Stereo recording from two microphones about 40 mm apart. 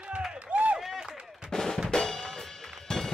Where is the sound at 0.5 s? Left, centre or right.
Right.